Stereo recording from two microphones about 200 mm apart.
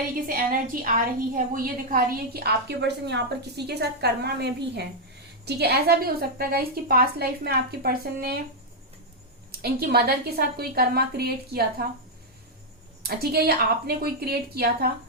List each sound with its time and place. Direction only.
0.3 s a woman's voice: 45° right (ahead or behind)
9.5 s a woman's voice: 50° right (ahead or behind)
13.0 s a woman's voice: 50° right (ahead or behind)